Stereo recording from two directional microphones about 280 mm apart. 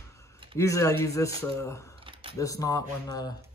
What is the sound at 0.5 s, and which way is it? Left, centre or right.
Speech, centre.